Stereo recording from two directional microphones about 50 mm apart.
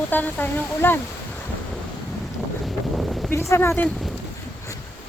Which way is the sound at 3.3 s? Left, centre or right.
Left.